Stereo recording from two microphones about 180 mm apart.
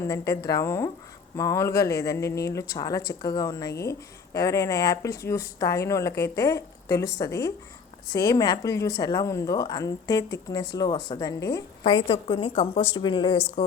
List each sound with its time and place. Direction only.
0.0 s a woman's voice: 15° left (ahead or behind)